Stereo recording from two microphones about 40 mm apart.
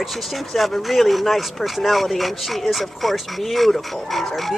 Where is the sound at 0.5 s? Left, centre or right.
Centre.